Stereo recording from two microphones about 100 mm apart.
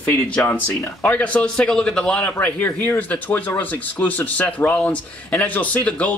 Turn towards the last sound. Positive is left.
turn(degrees=15)  # may be behind; listen again after turning